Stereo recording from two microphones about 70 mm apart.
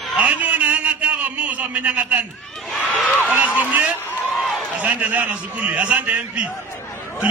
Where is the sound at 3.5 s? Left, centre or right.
Right.